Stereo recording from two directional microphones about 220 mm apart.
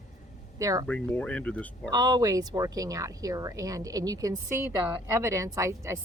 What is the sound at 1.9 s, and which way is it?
Speech, 20° right (ahead or behind).